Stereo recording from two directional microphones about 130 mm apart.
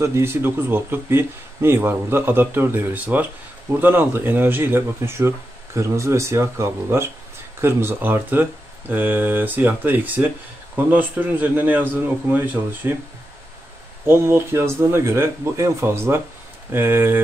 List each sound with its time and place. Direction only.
0.0 s speech: 20° right (ahead or behind)
14.0 s speech: 20° right (ahead or behind)